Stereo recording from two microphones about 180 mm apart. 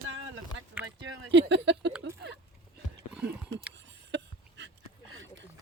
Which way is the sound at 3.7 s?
75° right (ahead or behind).